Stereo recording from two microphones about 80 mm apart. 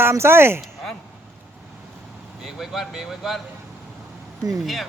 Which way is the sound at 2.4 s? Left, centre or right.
Centre.